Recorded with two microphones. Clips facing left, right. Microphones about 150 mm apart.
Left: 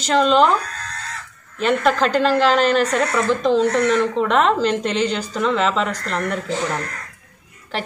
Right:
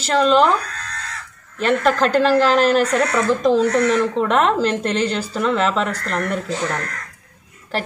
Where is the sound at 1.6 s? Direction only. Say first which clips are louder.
Right 1 dB; centre (ahead or behind).